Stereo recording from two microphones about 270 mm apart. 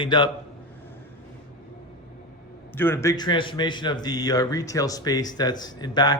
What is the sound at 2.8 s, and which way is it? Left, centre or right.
A man's voice, centre.